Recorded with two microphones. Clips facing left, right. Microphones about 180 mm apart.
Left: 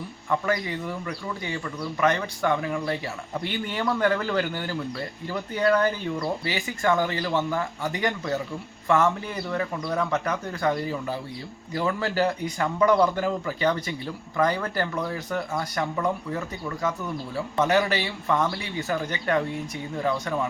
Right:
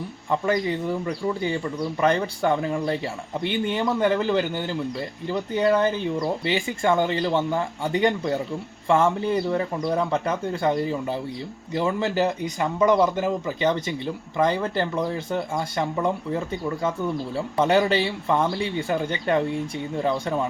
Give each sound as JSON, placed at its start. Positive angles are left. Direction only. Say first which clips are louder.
{"t": 0.3, "sound": "speech", "louder": "right 3 dB", "side_deg": -25}